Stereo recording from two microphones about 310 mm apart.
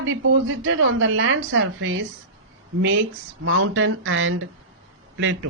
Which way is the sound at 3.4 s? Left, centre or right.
Right.